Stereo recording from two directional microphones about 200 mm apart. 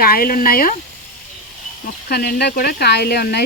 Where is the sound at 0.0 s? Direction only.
45° left (ahead or behind).